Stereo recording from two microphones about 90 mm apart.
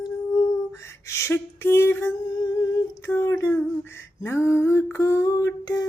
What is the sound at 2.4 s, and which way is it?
Humming, 45° left (ahead or behind).